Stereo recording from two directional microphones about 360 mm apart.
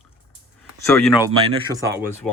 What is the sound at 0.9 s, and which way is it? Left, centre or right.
Speech, centre.